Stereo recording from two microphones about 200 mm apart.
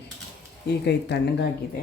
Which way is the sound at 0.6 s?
55° left (ahead or behind).